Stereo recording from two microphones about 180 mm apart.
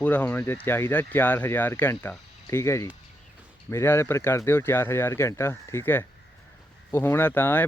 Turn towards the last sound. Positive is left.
turn(degrees=10)  # may be behind; listen again after turning